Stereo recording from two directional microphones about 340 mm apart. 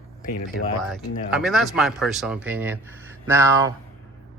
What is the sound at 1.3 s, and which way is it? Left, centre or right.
Speech, centre.